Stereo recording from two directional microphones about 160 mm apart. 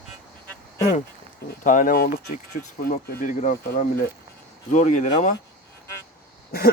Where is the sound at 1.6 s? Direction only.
55° left (ahead or behind).